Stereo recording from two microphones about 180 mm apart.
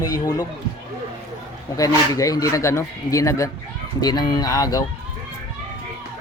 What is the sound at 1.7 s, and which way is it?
A man's voice, 20° left (ahead or behind).